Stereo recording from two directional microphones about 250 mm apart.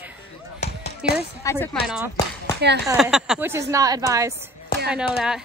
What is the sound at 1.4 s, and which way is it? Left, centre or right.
Speech, centre.